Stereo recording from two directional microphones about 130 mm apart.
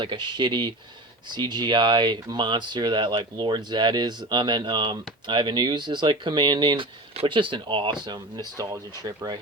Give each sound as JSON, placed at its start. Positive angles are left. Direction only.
{"t": 0.0, "sound": "speech", "side_deg": -40}